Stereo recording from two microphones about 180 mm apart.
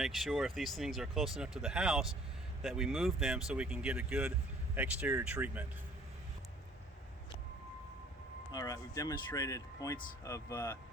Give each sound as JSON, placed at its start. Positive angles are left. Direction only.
{"t": 0.0, "sound": "speech", "side_deg": 0}
{"t": 8.5, "sound": "speech", "side_deg": 20}